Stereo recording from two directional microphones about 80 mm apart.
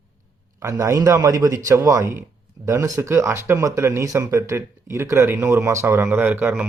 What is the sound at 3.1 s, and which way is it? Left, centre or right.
Speech, right.